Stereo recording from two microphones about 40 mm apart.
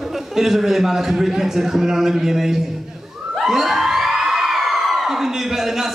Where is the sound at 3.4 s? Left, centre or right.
Centre.